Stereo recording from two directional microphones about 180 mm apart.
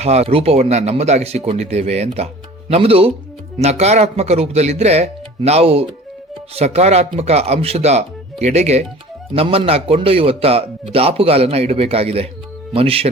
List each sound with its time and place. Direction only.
0.0 s speech: 35° right (ahead or behind)